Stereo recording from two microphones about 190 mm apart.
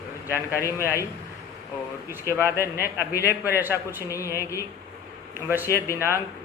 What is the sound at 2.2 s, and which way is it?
Speech, 15° left (ahead or behind).